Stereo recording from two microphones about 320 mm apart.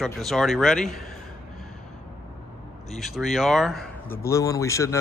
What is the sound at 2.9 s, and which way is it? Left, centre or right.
A man's voice, centre.